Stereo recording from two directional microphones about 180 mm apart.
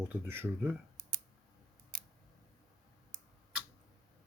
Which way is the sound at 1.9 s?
50° right (ahead or behind).